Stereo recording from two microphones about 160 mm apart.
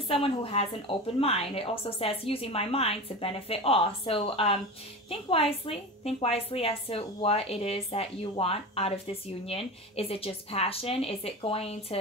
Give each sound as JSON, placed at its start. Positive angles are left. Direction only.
{"t": 0.1, "sound": "a woman's voice", "side_deg": 35}